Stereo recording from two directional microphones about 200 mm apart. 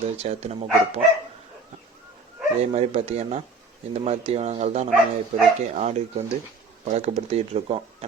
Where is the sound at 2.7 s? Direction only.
30° right (ahead or behind).